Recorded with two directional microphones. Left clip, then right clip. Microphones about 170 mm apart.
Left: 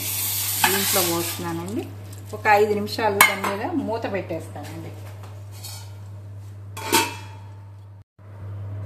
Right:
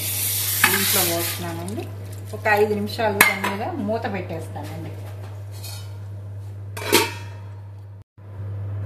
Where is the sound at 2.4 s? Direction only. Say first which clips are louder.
Left 1 dB; 60° left (ahead or behind).